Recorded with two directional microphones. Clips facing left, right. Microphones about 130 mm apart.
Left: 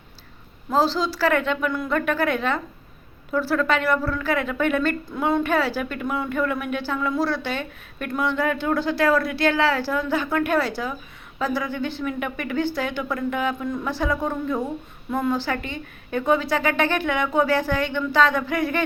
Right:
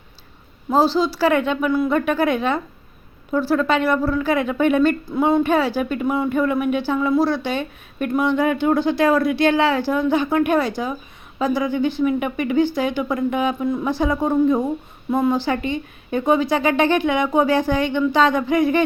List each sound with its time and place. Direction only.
0.7 s a woman's voice: 15° right (ahead or behind)
1.7 s a woman's voice: 5° right (ahead or behind)